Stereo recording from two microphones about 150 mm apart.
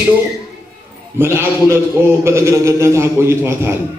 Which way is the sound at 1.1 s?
15° right (ahead or behind).